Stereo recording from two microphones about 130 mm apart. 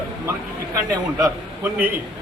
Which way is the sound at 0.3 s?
25° right (ahead or behind).